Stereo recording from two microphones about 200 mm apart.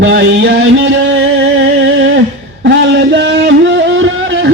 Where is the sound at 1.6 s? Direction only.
65° right (ahead or behind).